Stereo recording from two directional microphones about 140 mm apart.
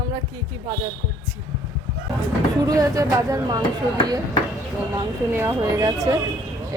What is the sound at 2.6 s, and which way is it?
Speech, 25° right (ahead or behind).